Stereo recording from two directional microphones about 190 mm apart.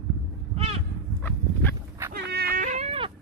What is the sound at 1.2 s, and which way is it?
Livestock, 10° left (ahead or behind).